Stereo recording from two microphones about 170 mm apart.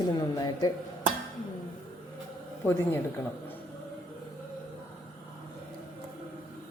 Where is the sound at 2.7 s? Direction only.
15° left (ahead or behind).